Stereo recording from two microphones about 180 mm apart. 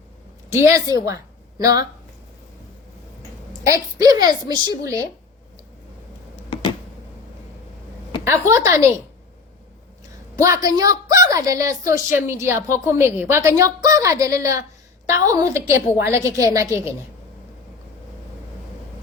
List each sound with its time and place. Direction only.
0.5 s a woman's voice: 15° right (ahead or behind)
3.9 s a woman's voice: 20° right (ahead or behind)
6.5 s a sound: 25° left (ahead or behind)
8.2 s a woman's voice: 15° right (ahead or behind)
10.3 s a woman's voice: 20° right (ahead or behind)